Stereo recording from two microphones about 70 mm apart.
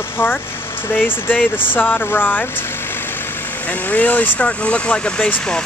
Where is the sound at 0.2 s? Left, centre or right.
Left.